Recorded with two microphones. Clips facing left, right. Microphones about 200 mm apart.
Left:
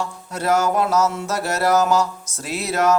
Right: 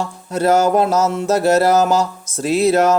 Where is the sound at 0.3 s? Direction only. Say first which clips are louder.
Right 5 dB; 30° right (ahead or behind).